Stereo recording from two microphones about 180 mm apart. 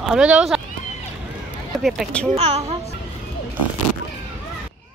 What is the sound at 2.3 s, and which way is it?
Speech, 35° right (ahead or behind).